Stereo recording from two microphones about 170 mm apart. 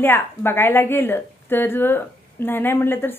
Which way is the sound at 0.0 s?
10° left (ahead or behind).